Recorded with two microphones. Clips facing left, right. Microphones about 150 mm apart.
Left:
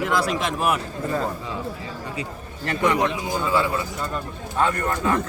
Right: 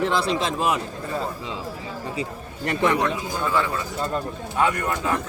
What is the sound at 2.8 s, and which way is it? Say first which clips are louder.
Speech: left 1 dB; 15° left (ahead or behind).